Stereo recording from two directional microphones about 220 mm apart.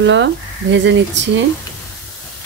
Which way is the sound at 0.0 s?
55° right (ahead or behind).